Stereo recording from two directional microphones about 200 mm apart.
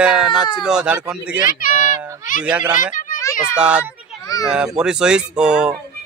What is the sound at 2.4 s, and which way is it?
Speech, 5° right (ahead or behind).